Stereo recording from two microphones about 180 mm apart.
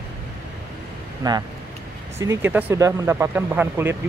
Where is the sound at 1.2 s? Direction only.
20° right (ahead or behind).